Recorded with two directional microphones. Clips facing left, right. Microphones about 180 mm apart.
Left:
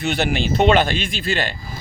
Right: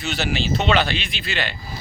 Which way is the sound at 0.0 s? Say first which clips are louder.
Left 4 dB; 55° left (ahead or behind).